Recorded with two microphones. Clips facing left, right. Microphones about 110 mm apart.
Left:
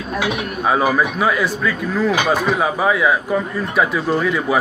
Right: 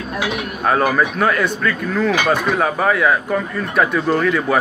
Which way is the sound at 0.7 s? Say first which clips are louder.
Even; 10° left (ahead or behind).